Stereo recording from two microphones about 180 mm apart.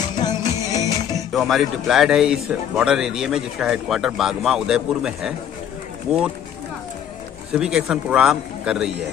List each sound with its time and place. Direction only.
0.2 s music: 20° left (ahead or behind)
1.3 s speech: centre (ahead or behind)
7.5 s speech: 5° right (ahead or behind)